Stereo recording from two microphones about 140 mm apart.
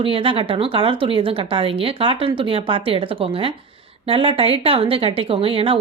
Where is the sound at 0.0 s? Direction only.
40° right (ahead or behind).